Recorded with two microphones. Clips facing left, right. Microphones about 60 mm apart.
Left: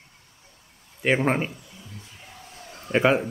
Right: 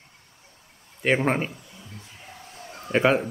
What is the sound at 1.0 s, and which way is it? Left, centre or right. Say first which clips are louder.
Speech: even; centre.